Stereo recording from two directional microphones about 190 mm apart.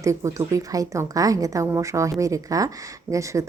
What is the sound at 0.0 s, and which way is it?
A woman's voice, 15° right (ahead or behind).